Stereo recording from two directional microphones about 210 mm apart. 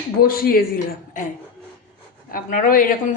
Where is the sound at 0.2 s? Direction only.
45° left (ahead or behind).